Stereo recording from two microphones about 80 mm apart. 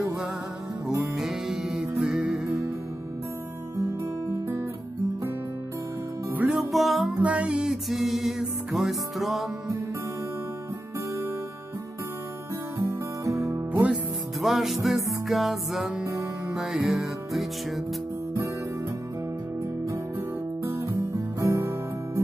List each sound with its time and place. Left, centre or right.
1.1 s music: centre
6.5 s music: centre
7.2 s music: centre
12.7 s music: right
14.4 s music: centre
21.4 s music: right